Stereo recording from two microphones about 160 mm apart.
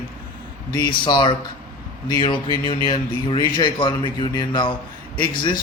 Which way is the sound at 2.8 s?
30° left (ahead or behind).